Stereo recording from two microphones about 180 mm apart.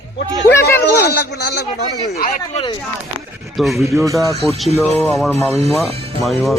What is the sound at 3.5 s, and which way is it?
Speech, centre (ahead or behind).